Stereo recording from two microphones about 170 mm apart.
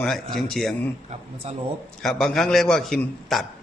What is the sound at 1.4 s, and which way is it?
Speech, 40° right (ahead or behind).